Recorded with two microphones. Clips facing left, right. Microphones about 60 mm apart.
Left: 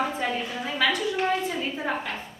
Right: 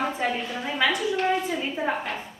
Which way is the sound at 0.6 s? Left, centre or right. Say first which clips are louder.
Right 1 dB; centre.